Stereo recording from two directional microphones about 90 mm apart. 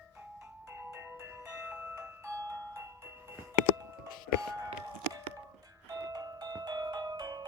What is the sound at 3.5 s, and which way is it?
Music, 35° right (ahead or behind).